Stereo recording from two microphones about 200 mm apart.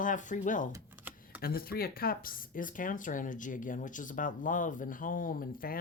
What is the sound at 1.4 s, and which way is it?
Speech, 50° left (ahead or behind).